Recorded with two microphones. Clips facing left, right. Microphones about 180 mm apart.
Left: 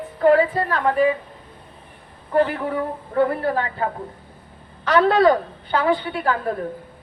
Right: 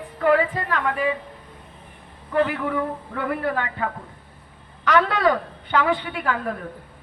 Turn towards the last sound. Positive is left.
turn(degrees=35)  # may be behind; listen again after turning